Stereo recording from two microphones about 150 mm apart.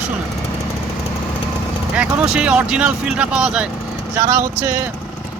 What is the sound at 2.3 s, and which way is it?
Speech, 5° right (ahead or behind).